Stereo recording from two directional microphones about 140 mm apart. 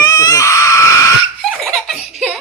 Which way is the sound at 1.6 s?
Centre (ahead or behind).